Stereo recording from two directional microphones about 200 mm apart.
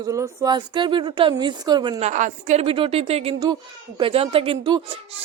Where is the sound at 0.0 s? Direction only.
15° right (ahead or behind).